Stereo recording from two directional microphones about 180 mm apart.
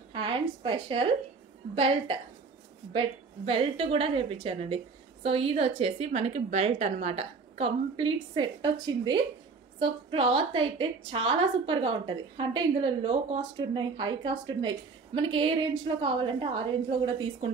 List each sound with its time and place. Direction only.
0.1 s speech: 30° right (ahead or behind)
2.9 s a woman's voice: 30° right (ahead or behind)